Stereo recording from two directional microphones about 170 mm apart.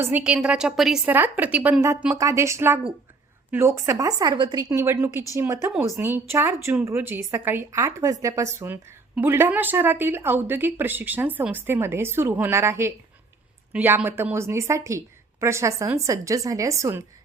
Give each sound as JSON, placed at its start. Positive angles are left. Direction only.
{"t": 0.0, "sound": "a woman's voice", "side_deg": -10}